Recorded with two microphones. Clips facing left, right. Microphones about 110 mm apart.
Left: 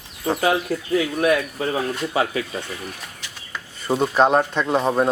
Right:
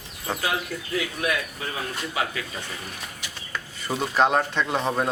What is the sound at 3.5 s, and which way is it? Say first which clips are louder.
Speech: left 6 dB; 15° left (ahead or behind).